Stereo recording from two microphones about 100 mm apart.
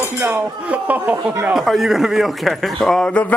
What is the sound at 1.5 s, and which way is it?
Speech, centre (ahead or behind).